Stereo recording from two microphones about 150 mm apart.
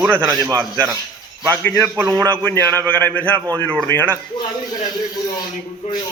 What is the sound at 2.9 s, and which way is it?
A man's voice, 10° left (ahead or behind).